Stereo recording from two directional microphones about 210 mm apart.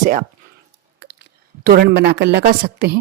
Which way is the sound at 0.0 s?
40° right (ahead or behind).